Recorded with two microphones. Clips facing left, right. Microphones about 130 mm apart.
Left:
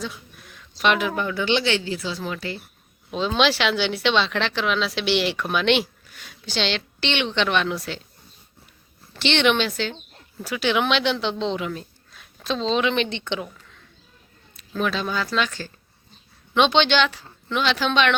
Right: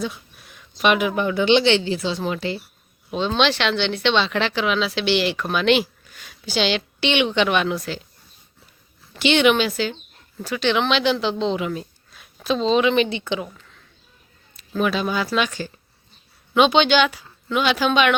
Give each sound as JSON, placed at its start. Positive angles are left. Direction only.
{"t": 0.5, "sound": "speech", "side_deg": -15}
{"t": 3.1, "sound": "speech", "side_deg": 0}
{"t": 9.1, "sound": "speech", "side_deg": -10}
{"t": 14.5, "sound": "speech", "side_deg": -5}